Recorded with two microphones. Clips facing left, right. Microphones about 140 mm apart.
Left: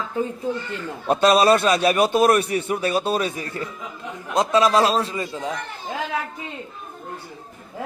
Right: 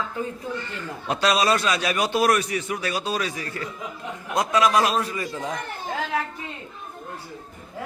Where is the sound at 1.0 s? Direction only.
50° left (ahead or behind).